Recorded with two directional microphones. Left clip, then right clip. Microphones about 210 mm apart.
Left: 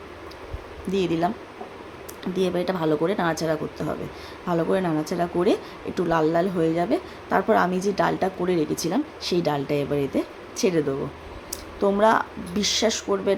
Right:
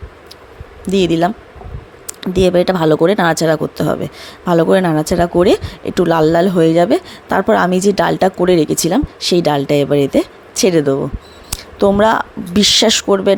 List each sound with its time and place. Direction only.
0.9 s speech: 35° right (ahead or behind)